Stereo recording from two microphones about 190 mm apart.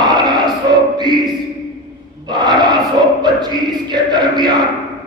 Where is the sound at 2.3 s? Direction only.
20° right (ahead or behind).